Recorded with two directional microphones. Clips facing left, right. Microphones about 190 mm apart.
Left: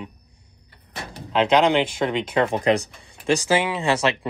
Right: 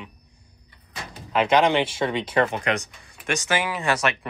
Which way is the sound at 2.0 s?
15° left (ahead or behind).